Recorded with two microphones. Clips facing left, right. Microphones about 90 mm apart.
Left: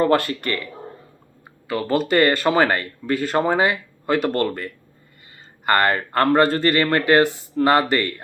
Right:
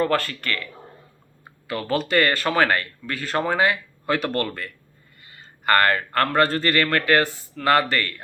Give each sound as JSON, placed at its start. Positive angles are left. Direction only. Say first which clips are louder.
{"t": 0.0, "sound": "speech", "louder": "left 4 dB", "side_deg": 20}
{"t": 1.7, "sound": "speech", "louder": "left 3 dB", "side_deg": 5}
{"t": 6.1, "sound": "speech", "louder": "left 3 dB", "side_deg": 20}